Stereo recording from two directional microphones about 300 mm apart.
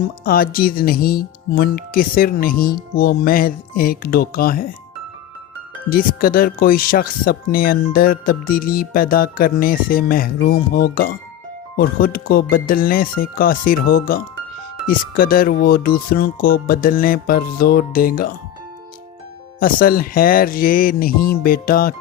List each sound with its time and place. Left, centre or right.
0.3 s speech: left
5.9 s speech: left
19.5 s speech: left